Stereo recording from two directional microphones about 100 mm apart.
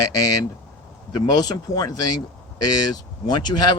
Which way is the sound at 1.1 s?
45° left (ahead or behind).